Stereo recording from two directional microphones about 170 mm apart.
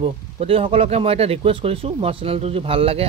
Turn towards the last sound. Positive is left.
turn(degrees=-35)  # may be behind; listen again after turning